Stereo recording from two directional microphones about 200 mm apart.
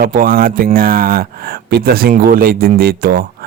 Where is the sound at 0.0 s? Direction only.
45° right (ahead or behind).